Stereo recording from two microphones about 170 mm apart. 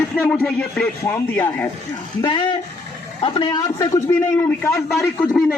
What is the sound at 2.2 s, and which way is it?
A man's voice, 25° left (ahead or behind).